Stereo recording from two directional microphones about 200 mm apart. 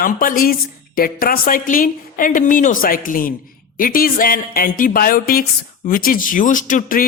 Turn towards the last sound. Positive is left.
turn(degrees=45)  # may be behind; listen again after turning